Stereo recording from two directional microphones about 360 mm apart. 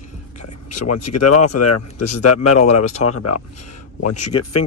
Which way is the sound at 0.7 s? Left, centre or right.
Left.